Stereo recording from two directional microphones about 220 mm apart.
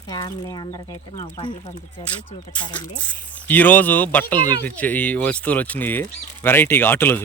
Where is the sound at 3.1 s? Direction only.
5° left (ahead or behind).